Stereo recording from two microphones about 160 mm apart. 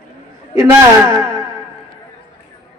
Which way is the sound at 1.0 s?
20° right (ahead or behind).